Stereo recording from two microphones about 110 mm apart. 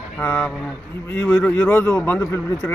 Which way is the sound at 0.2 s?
10° left (ahead or behind).